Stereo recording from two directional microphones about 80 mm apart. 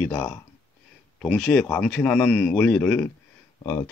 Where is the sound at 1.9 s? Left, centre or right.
Centre.